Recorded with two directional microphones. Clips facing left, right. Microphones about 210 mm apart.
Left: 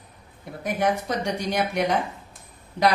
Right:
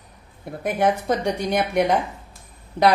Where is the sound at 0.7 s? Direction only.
55° right (ahead or behind).